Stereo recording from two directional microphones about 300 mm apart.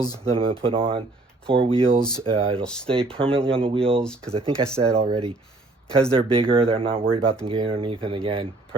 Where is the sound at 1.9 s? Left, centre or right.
Centre.